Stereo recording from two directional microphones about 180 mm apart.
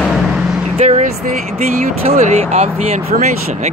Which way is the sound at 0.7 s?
40° right (ahead or behind).